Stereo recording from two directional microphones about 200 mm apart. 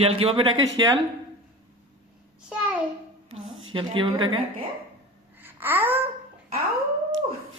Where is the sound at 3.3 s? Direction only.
80° right.